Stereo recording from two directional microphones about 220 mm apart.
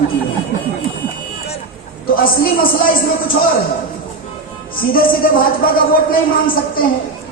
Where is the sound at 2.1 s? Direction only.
40° left (ahead or behind).